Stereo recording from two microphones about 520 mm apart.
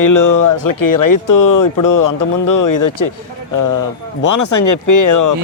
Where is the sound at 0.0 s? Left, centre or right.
Left.